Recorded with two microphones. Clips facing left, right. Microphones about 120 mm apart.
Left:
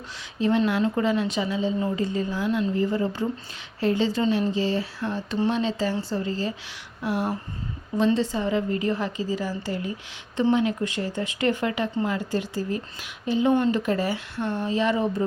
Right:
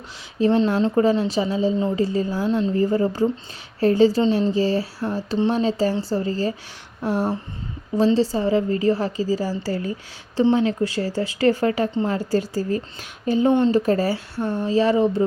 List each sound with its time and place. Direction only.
0.3 s a woman's voice: 35° right (ahead or behind)
13.5 s speech: 25° right (ahead or behind)
13.7 s a woman's voice: 35° right (ahead or behind)